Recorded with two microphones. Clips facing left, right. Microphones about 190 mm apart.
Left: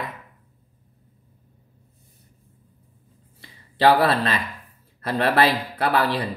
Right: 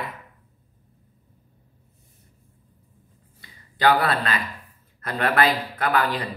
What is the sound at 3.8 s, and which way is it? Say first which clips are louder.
Speech: left 3 dB; 30° left (ahead or behind).